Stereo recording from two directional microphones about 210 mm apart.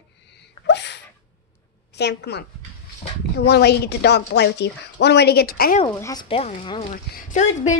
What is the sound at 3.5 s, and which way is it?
A woman's voice, 50° left (ahead or behind).